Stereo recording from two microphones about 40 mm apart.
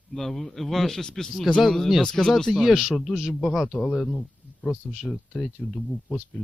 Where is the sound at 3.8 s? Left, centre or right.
Left.